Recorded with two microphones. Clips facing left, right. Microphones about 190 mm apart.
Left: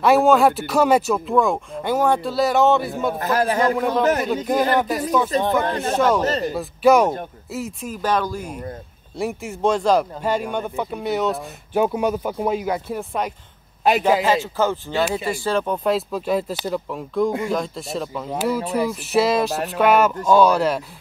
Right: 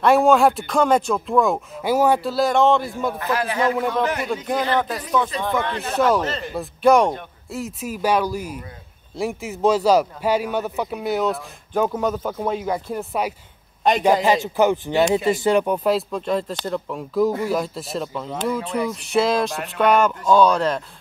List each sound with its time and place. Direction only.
0.0 s speech: centre (ahead or behind)
3.2 s a man's voice: 40° left (ahead or behind)
4.7 s speech: 10° left (ahead or behind)
5.3 s speech: 40° left (ahead or behind)
5.9 s speech: centre (ahead or behind)
6.2 s speech: 40° left (ahead or behind)
6.5 s speech: centre (ahead or behind)
11.8 s speech: 10° left (ahead or behind)
14.2 s speech: 15° right (ahead or behind); by 20.8 s 10° left (ahead or behind)